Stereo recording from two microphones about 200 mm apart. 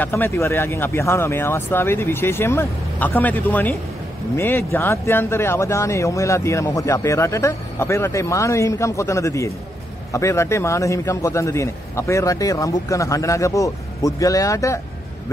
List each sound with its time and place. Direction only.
0.0 s speech: 10° left (ahead or behind)